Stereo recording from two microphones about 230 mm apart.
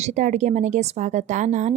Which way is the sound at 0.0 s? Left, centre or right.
Right.